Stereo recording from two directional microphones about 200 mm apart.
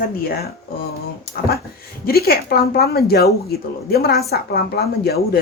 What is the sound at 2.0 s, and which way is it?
Speech, 50° left (ahead or behind).